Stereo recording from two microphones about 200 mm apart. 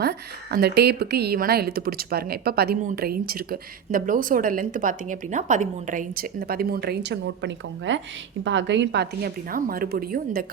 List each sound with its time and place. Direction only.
0.0 s speech: 50° right (ahead or behind)